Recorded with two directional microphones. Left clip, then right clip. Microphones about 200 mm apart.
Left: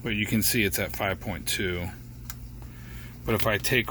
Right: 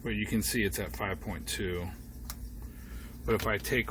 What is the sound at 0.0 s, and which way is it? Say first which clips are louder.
Speech: left 6 dB; 30° left (ahead or behind).